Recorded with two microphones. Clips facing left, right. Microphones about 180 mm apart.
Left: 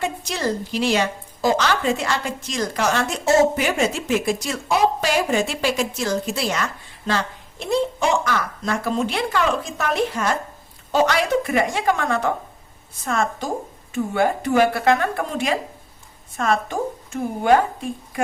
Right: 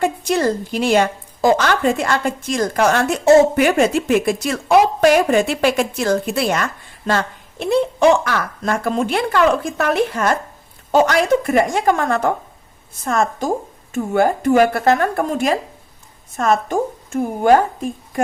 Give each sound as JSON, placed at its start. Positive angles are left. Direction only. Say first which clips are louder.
{"t": 0.0, "sound": "a woman's voice", "louder": "right 7 dB", "side_deg": -55}